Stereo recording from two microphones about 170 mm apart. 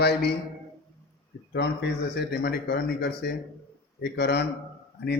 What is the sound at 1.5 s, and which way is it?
A man's voice, 80° left.